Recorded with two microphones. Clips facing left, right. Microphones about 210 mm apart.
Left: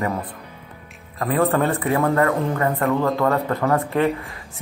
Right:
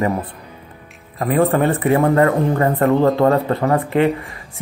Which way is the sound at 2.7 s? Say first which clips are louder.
Right 6 dB; 40° right (ahead or behind).